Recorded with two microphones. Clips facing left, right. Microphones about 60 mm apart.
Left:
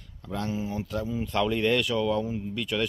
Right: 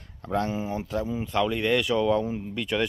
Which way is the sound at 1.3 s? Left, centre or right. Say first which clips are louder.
Even; centre.